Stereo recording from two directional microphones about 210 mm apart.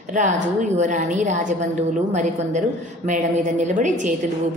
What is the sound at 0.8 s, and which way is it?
A woman's voice, 35° right (ahead or behind).